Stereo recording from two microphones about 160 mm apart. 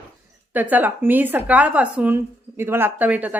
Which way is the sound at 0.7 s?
10° right (ahead or behind).